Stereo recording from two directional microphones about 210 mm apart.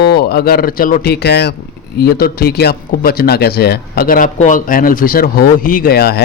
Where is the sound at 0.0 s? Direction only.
50° left (ahead or behind).